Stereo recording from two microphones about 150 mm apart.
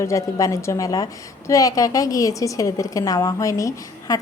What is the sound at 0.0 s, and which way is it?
Speech, 20° left (ahead or behind).